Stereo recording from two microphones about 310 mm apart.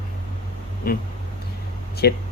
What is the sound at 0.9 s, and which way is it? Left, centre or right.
Speech, left.